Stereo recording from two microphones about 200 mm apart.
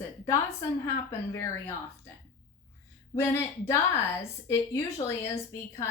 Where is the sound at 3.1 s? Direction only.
10° left (ahead or behind).